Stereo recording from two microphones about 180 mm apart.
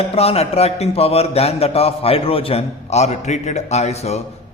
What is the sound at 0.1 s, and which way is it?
A man's voice, 35° left (ahead or behind).